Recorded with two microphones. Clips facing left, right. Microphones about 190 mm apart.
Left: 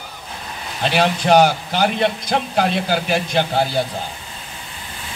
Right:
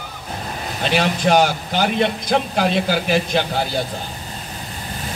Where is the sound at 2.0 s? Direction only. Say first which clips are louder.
Right 1 dB; 55° right (ahead or behind).